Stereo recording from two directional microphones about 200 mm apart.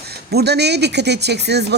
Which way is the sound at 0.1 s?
55° right (ahead or behind).